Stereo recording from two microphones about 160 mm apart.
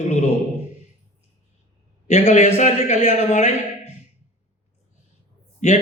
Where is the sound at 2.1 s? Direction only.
45° left (ahead or behind).